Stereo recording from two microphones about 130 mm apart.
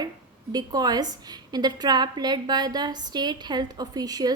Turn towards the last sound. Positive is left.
turn(degrees=-30)  # may be behind; listen again after turning